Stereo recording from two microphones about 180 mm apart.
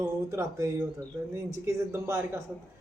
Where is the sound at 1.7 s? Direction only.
15° right (ahead or behind).